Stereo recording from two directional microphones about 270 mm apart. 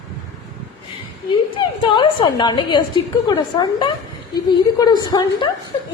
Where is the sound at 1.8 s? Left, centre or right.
Centre.